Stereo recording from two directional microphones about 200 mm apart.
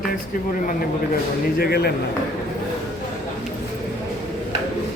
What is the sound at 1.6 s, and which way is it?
Speech, 50° left (ahead or behind).